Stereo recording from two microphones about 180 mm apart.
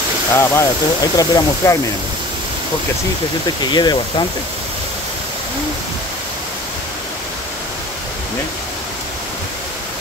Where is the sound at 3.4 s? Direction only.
25° left (ahead or behind).